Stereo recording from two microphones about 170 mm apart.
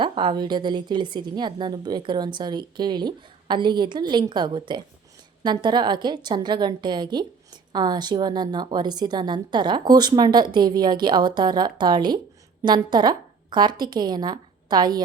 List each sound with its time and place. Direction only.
0.0 s a woman's voice: 30° right (ahead or behind)